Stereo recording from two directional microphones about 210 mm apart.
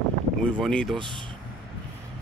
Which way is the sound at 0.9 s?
25° right (ahead or behind).